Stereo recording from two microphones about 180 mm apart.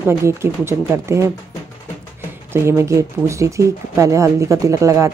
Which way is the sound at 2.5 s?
15° right (ahead or behind).